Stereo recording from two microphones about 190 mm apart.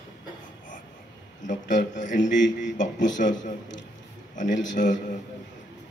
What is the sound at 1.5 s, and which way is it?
A man's voice, 40° left (ahead or behind).